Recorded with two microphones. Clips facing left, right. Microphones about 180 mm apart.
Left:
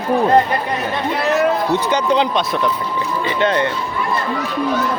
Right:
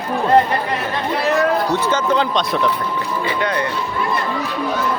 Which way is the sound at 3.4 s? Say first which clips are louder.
Left 6 dB; 25° left (ahead or behind).